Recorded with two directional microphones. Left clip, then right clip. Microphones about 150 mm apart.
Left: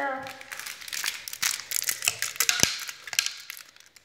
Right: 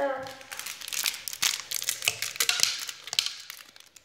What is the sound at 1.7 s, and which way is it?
Crumpling, 15° right (ahead or behind).